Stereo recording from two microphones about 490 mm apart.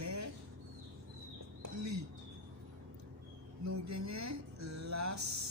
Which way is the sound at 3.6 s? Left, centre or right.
Right.